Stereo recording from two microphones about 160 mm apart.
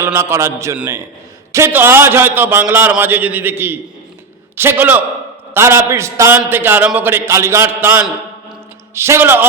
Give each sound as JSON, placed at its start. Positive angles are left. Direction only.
{"t": 0.0, "sound": "a man's voice", "side_deg": -15}